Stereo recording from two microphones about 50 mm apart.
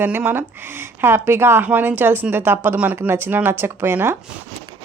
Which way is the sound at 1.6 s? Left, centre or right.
Right.